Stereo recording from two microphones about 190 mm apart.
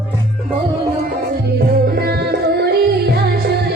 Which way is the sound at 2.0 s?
55° right (ahead or behind).